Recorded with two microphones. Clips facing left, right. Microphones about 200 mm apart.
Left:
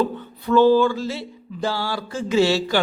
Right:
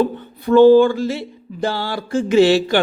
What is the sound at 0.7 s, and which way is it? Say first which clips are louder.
A man's voice: right 6 dB; 50° right (ahead or behind).